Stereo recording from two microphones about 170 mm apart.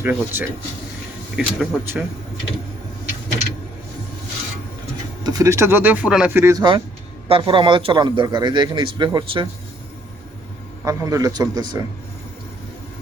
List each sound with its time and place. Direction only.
0.0 s speech: 10° right (ahead or behind)
5.2 s speech: 20° right (ahead or behind)
7.3 s a man's voice: 30° right (ahead or behind)
10.8 s a man's voice: 20° right (ahead or behind)